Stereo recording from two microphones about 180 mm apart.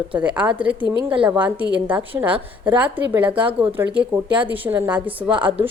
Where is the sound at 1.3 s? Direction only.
10° right (ahead or behind).